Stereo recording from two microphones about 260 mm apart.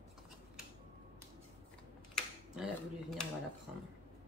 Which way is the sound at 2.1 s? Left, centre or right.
Centre.